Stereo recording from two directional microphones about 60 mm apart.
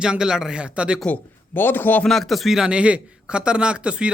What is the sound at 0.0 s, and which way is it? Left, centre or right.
Speech, centre.